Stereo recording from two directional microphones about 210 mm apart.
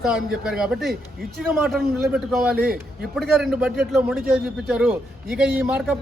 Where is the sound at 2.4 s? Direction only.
45° right (ahead or behind).